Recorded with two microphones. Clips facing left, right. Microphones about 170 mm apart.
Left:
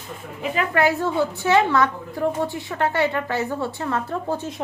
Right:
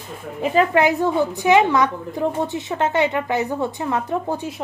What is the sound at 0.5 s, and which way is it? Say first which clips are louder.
A woman's voice: right 4 dB; 20° right (ahead or behind).